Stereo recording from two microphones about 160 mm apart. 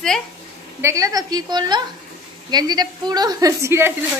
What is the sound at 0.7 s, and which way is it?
A woman's voice, 20° right (ahead or behind).